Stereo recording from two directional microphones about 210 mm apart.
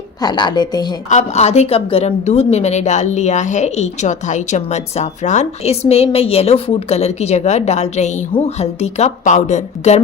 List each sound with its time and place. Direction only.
0.2 s a woman's voice: 20° left (ahead or behind)
1.1 s a woman's voice: 30° left (ahead or behind)